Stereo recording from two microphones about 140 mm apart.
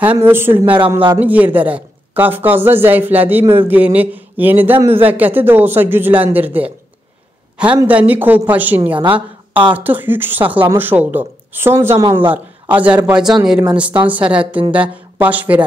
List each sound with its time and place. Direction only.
0.0 s speech: 15° right (ahead or behind)
7.8 s speech: 10° right (ahead or behind)